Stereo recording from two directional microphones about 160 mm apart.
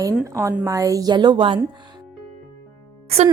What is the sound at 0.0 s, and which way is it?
A woman's voice, 20° right (ahead or behind).